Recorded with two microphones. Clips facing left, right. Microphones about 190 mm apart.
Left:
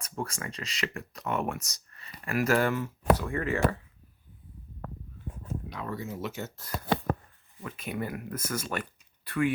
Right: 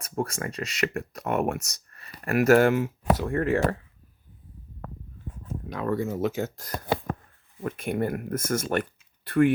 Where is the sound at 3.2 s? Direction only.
50° right (ahead or behind).